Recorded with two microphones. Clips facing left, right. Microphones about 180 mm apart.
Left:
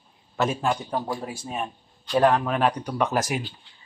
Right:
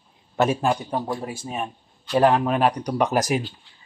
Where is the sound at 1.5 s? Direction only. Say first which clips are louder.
Right 1 dB; centre (ahead or behind).